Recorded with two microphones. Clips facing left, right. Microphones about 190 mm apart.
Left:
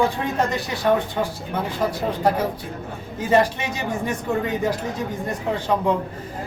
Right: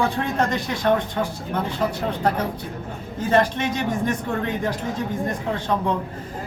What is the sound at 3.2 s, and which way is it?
Speech, 10° left (ahead or behind).